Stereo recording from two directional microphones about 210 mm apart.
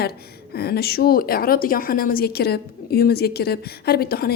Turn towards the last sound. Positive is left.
turn(degrees=45)  # may be behind; listen again after turning